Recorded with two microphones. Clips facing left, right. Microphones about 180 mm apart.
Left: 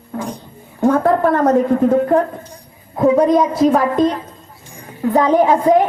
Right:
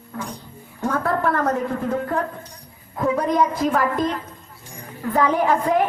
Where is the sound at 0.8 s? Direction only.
25° left (ahead or behind).